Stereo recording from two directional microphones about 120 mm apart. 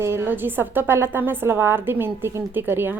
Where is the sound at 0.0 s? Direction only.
20° right (ahead or behind).